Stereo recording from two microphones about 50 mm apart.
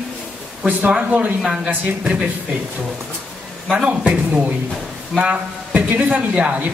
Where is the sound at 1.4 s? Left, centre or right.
Centre.